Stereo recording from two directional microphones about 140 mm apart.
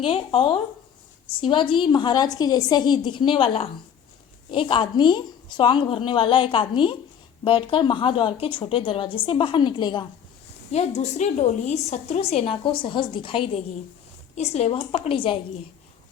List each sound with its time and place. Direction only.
0.0 s a woman's voice: 40° left (ahead or behind)
10.7 s a woman's voice: 50° left (ahead or behind)